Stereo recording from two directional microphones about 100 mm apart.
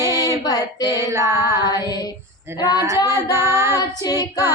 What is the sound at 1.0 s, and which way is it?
Child singing, 25° right (ahead or behind).